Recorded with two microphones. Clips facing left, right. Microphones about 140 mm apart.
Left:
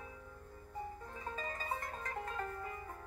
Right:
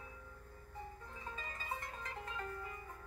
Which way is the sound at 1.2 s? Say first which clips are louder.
Left 6 dB; 40° left (ahead or behind).